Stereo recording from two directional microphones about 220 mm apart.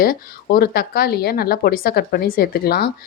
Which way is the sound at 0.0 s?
40° left (ahead or behind).